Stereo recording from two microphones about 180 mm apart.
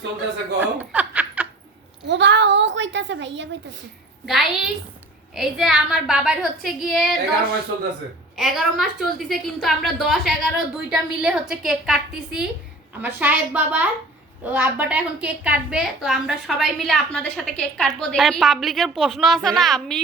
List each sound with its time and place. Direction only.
0.6 s snicker: 10° right (ahead or behind)
2.0 s a sound: 75° right (ahead or behind)
4.3 s a woman's voice: centre (ahead or behind)
8.4 s a woman's voice: 5° right (ahead or behind)